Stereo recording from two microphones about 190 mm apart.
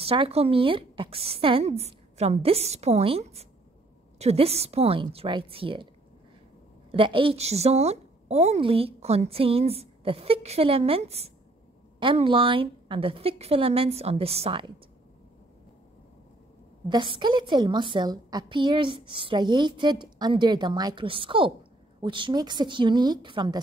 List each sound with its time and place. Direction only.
0.0 s a woman's voice: 30° right (ahead or behind)
6.9 s a woman's voice: 25° right (ahead or behind)
16.9 s a woman's voice: 25° right (ahead or behind)